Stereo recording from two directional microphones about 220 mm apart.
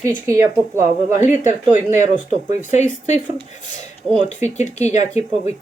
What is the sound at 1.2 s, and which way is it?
Speech, 35° left (ahead or behind).